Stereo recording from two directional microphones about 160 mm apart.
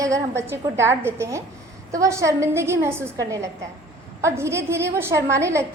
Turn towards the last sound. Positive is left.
turn(degrees=-20)  # may be behind; listen again after turning